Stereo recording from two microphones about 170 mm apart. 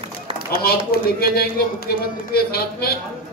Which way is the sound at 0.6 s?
65° left (ahead or behind).